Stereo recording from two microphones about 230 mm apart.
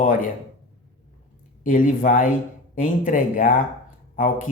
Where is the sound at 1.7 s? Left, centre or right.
Left.